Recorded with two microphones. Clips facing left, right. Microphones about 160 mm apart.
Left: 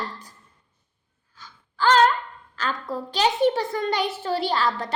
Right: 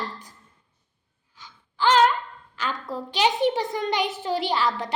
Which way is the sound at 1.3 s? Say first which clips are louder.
Left 1 dB; 15° right (ahead or behind).